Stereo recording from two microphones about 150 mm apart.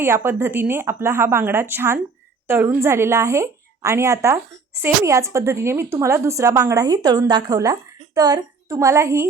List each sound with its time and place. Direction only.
0.0 s a woman's voice: 15° right (ahead or behind)